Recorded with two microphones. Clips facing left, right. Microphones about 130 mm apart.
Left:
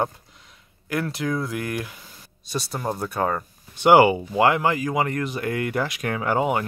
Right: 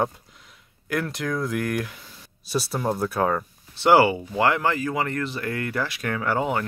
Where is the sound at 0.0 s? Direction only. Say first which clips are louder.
Even; centre (ahead or behind).